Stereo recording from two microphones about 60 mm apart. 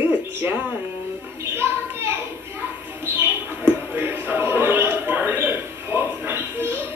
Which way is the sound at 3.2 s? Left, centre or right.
Right.